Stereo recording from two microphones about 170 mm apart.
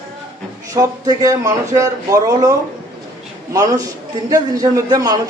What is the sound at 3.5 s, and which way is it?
Speech, 20° right (ahead or behind).